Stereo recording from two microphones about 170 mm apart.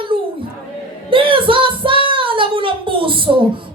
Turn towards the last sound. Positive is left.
turn(degrees=-30)  # may be behind; listen again after turning